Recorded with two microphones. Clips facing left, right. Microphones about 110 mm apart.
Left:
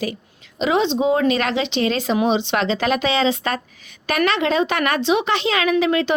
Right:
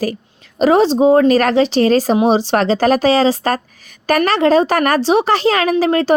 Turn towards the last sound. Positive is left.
turn(degrees=-40)  # may be behind; listen again after turning